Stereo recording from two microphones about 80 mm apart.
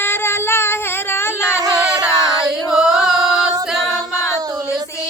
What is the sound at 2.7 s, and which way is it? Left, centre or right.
Singing, centre.